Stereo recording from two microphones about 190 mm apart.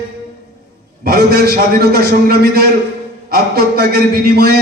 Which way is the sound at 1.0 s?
55° right (ahead or behind).